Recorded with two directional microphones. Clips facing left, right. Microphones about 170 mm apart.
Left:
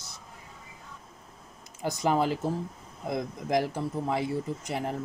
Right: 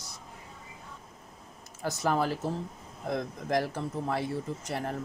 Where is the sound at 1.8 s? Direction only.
15° left (ahead or behind).